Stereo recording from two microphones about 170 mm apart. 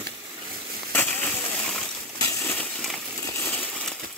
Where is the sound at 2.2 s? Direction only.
15° left (ahead or behind).